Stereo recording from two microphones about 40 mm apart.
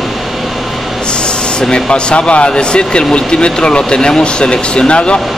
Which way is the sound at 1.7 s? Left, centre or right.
Left.